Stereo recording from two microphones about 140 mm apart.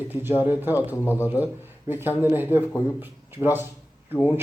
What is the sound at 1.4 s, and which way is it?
A man's voice, 15° right (ahead or behind).